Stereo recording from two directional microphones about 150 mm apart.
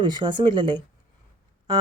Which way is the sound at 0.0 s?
30° right (ahead or behind).